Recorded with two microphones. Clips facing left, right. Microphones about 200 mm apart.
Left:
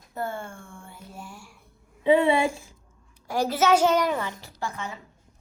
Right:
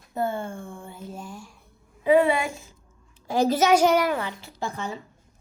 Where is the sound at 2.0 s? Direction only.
25° left (ahead or behind).